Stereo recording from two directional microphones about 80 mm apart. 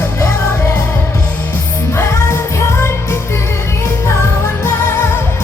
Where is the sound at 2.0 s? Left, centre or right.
Left.